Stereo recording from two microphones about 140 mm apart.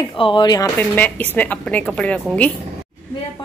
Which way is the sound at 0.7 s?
10° left (ahead or behind).